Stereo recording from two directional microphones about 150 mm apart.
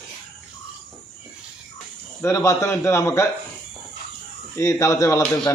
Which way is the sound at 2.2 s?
20° left (ahead or behind).